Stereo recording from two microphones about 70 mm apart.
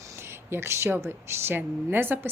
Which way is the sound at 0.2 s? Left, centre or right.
Right.